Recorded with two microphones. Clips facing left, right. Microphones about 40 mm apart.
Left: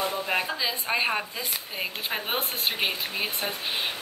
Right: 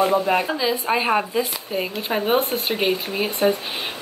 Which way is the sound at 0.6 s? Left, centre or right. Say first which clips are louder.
Right 6 dB; centre.